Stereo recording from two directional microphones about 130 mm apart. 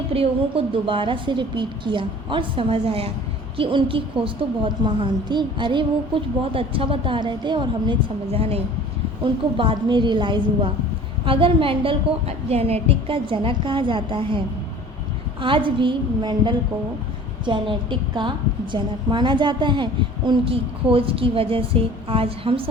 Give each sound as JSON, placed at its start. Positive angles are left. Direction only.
{"t": 0.1, "sound": "a woman's voice", "side_deg": -45}